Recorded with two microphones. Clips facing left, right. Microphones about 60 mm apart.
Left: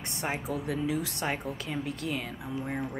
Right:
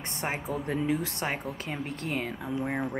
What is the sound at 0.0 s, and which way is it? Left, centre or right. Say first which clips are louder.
Speech: right 1 dB; right.